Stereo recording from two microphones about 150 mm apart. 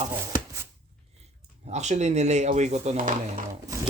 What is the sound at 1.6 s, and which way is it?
Speech, 50° right (ahead or behind).